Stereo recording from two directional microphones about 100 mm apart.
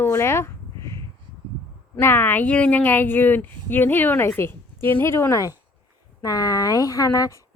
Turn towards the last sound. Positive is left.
turn(degrees=30)  # may be behind; listen again after turning